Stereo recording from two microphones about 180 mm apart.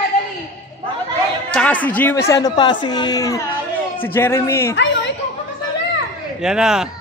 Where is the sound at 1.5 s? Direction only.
5° left (ahead or behind).